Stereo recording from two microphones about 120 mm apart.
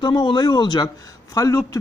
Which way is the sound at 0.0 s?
40° left (ahead or behind).